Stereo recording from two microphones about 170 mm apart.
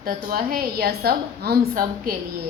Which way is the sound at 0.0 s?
60° right (ahead or behind).